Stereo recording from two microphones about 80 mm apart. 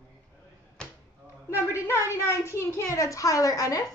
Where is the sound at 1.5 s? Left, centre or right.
Left.